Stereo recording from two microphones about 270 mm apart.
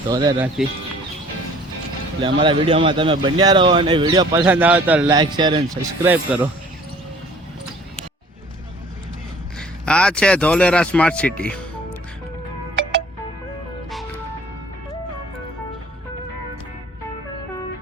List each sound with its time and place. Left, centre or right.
0.1 s speech: centre
2.2 s speech: centre
9.6 s speech: centre